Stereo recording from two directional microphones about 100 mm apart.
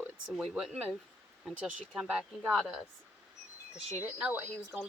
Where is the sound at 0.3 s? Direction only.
5° right (ahead or behind).